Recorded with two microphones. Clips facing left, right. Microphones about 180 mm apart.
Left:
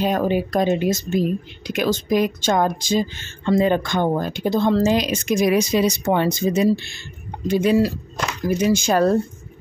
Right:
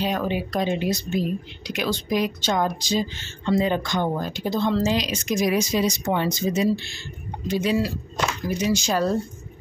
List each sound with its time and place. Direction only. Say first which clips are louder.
0.0 s speech: left 5 dB; 45° left (ahead or behind)